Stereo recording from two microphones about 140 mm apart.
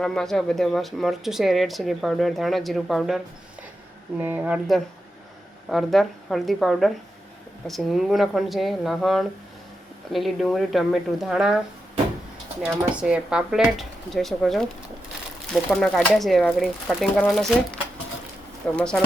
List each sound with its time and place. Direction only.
0.0 s speech: 5° left (ahead or behind)
4.2 s speech: 10° right (ahead or behind)
5.6 s speech: centre (ahead or behind)
12.6 s speech: 10° right (ahead or behind)
15.7 s speech: 5° left (ahead or behind)
18.8 s speech: 5° left (ahead or behind)